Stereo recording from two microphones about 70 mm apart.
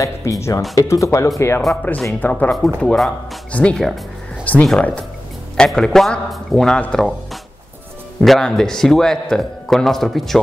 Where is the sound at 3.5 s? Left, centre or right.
Centre.